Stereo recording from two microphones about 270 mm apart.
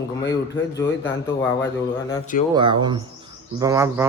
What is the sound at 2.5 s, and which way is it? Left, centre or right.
A man's voice, centre.